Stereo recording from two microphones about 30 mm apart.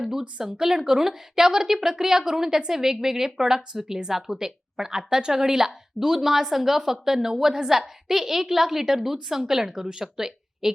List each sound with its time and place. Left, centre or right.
0.0 s a woman's voice: centre